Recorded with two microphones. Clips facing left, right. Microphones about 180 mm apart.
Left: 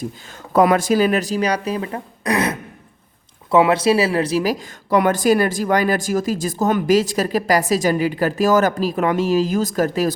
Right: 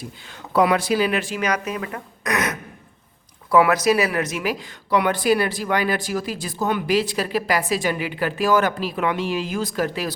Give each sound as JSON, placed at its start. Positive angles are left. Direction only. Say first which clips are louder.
{"t": 0.5, "sound": "a woman's voice", "louder": "left 4 dB", "side_deg": 45}